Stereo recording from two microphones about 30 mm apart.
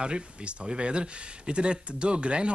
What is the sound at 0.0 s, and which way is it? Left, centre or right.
Speech, right.